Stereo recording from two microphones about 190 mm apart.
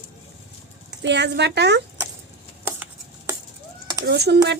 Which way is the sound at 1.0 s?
65° right (ahead or behind).